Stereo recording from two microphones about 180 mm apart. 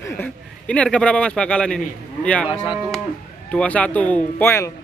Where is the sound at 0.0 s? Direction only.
10° left (ahead or behind).